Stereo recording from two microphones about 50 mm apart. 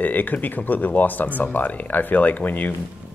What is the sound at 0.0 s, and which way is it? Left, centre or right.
Speech, left.